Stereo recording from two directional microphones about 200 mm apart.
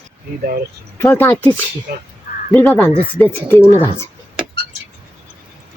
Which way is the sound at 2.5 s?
10° left (ahead or behind).